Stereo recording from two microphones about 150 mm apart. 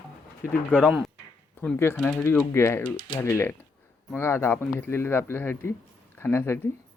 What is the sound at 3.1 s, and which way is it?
Speech, 20° left (ahead or behind).